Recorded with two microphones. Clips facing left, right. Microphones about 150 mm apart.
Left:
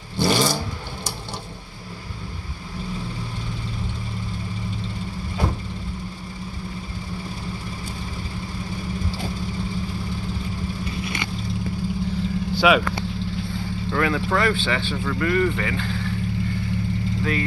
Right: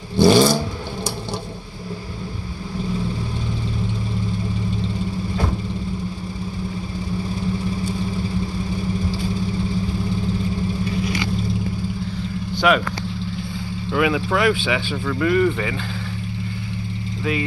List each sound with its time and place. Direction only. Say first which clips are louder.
0.2 s vehicle: right 7 dB; 20° right (ahead or behind)
12.5 s vehicle: even; 5° left (ahead or behind)
13.9 s speech: right 3 dB; 10° right (ahead or behind)